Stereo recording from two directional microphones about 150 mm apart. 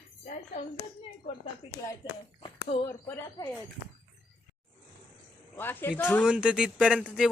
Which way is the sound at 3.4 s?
25° left (ahead or behind).